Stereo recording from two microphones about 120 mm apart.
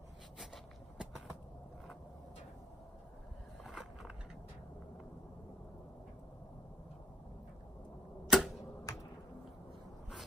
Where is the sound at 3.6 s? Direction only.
5° right (ahead or behind).